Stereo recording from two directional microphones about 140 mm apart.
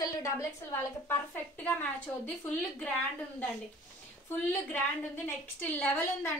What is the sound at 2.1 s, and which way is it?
Speech, 5° left (ahead or behind).